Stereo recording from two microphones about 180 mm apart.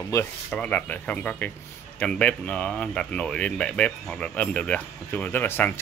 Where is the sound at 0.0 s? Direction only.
15° left (ahead or behind).